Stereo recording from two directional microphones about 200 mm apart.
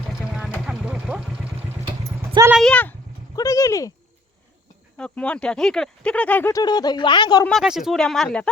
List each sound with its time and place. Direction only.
0.1 s vehicle: centre (ahead or behind)
2.0 s vehicle: 15° right (ahead or behind)
2.6 s speech: 5° left (ahead or behind)
3.3 s a sound: 15° left (ahead or behind)
4.9 s speech: 5° left (ahead or behind); by 7.4 s 20° left (ahead or behind)
7.4 s speech: centre (ahead or behind)